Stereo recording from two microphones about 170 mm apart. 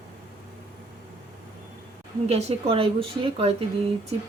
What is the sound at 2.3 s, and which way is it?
Speech, 40° right (ahead or behind).